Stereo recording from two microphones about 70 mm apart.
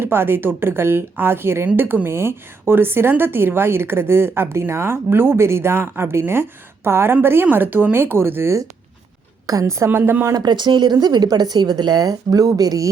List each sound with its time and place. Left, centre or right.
0.0 s a woman's voice: right
9.5 s a woman's voice: right
9.9 s a woman's voice: right
10.3 s speech: right